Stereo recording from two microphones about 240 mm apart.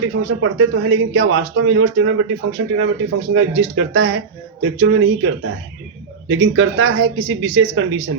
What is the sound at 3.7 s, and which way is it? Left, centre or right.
Speech, right.